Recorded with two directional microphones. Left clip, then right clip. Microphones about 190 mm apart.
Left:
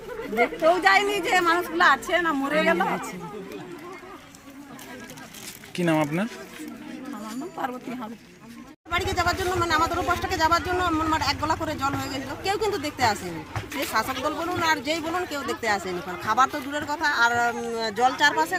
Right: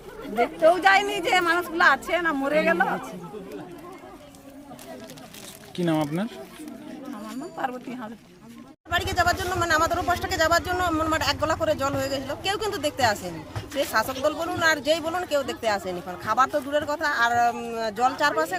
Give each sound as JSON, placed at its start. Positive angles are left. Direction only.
{"t": 0.3, "sound": "speech", "side_deg": -35}
{"t": 5.7, "sound": "speech", "side_deg": -5}
{"t": 7.6, "sound": "speech", "side_deg": -25}
{"t": 8.9, "sound": "speech", "side_deg": -30}